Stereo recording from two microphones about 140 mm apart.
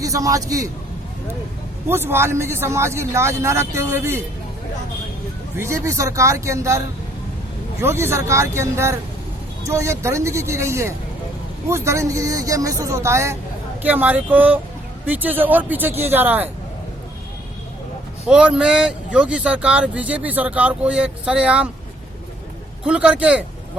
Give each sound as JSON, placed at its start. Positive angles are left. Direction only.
{"t": 0.0, "sound": "a man's voice", "side_deg": -25}
{"t": 1.9, "sound": "a man's voice", "side_deg": -15}
{"t": 5.5, "sound": "a man's voice", "side_deg": -20}
{"t": 18.3, "sound": "speech", "side_deg": -10}
{"t": 22.8, "sound": "speech", "side_deg": -10}